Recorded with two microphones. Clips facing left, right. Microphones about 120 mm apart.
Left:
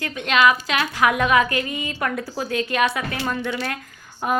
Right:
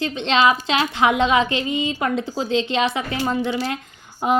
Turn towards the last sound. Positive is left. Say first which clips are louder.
# right 3 dB
turn(degrees=-20)  # may be behind; listen again after turning